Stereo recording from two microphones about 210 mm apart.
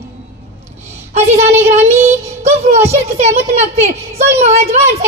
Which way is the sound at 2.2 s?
30° right (ahead or behind).